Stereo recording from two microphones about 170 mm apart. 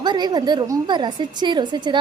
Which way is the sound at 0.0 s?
25° right (ahead or behind).